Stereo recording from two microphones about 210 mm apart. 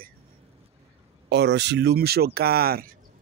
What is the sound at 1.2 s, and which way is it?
Speech, 55° right (ahead or behind).